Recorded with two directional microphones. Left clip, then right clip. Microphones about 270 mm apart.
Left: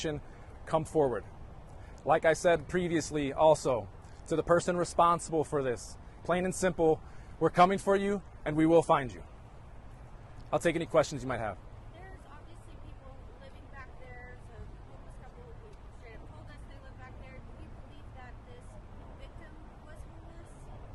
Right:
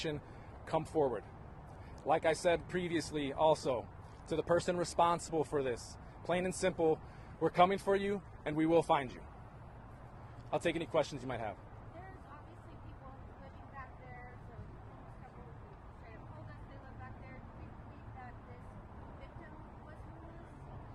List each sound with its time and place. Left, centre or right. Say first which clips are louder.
0.6 s speech: left 5 dB; left
10.5 s speech: left 6 dB; left